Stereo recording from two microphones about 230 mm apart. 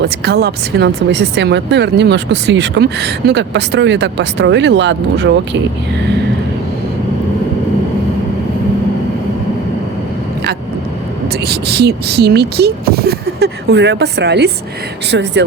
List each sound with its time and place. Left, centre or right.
0.0 s speech: right
11.4 s speech: right